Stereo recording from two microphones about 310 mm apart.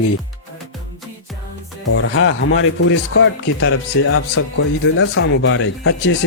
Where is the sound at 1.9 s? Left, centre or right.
Left.